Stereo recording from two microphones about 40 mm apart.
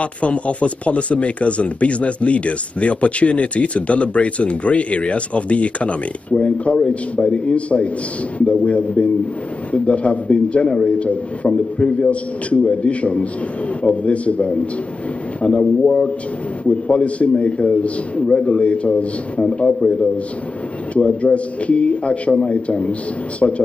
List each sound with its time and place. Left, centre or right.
0.0 s a man's voice: left
16.6 s speech: left
19.4 s a man's voice: centre
20.9 s speech: left